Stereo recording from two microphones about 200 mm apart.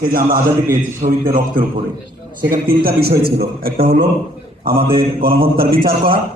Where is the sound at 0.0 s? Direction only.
45° right (ahead or behind).